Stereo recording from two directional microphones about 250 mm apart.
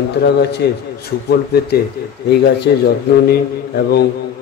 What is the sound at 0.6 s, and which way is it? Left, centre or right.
Speech, left.